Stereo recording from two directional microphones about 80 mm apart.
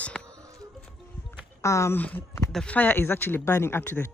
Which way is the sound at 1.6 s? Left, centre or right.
Left.